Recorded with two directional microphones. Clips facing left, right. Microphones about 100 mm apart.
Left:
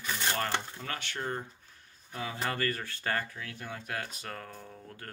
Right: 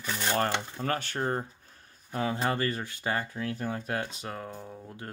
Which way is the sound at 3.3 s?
35° right (ahead or behind).